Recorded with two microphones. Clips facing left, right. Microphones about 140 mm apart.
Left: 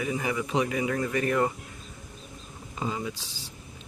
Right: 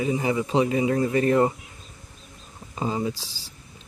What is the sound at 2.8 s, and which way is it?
Speech, 30° right (ahead or behind).